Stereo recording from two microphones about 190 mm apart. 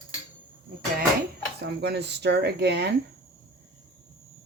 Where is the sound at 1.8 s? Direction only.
65° right (ahead or behind).